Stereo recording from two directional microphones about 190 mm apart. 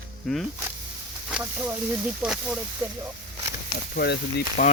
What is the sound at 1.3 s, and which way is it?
Speech, 10° right (ahead or behind).